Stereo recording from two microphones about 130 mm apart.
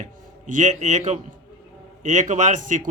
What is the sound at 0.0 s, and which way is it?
A man's voice, 70° right (ahead or behind).